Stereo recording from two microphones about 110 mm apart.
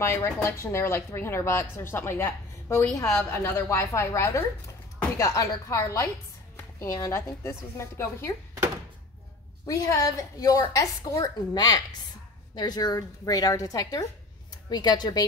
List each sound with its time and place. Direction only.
0.0 s speech: 25° left (ahead or behind)
9.7 s a woman's voice: 30° left (ahead or behind)